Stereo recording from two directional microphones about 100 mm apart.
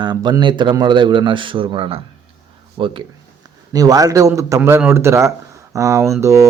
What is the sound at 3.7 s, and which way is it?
A man's voice, 40° right (ahead or behind).